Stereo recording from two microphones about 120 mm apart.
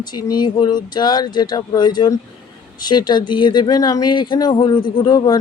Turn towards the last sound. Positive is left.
turn(degrees=35)  # may be behind; listen again after turning